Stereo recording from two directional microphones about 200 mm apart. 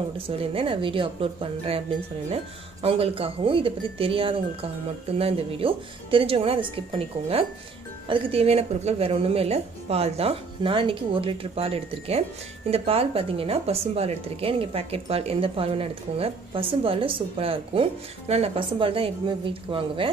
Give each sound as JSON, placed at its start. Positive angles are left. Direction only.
{"t": 0.4, "sound": "speech", "side_deg": -25}